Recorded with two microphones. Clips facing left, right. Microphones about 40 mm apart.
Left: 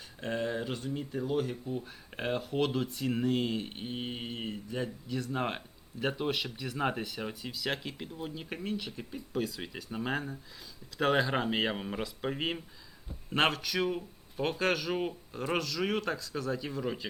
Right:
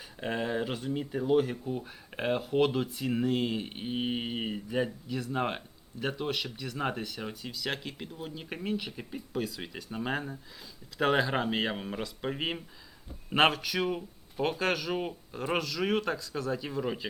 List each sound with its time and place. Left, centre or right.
0.2 s speech: centre
5.0 s speech: centre
9.4 s speech: centre